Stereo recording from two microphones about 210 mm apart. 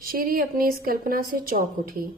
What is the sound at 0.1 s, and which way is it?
A woman's voice, 45° right (ahead or behind).